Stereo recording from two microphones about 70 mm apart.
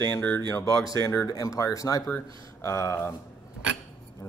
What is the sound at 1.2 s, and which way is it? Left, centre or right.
Speech, left.